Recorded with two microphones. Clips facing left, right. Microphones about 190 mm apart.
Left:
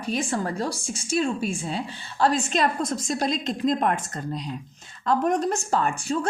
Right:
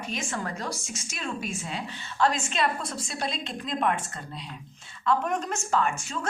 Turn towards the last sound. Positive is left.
turn(degrees=35)  # may be behind; listen again after turning